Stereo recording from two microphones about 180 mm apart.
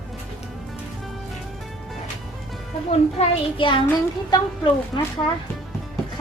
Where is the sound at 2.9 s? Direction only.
35° left (ahead or behind).